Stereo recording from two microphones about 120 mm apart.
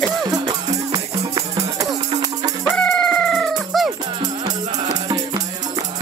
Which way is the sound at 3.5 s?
Centre (ahead or behind).